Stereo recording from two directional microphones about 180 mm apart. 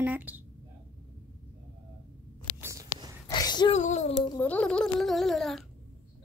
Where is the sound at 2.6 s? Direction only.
15° right (ahead or behind).